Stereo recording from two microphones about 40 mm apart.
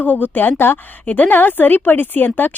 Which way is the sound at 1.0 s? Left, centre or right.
Left.